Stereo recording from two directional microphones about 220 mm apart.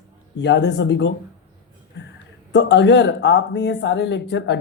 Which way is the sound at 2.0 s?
50° left (ahead or behind).